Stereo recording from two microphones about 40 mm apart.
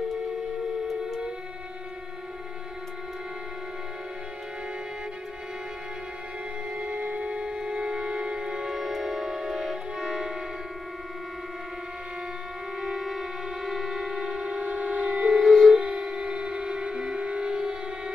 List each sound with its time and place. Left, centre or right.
6.8 s music: right
7.4 s music: centre
8.7 s music: centre
12.8 s music: centre
14.2 s siren: right
15.2 s a sound: centre
15.8 s shofar: centre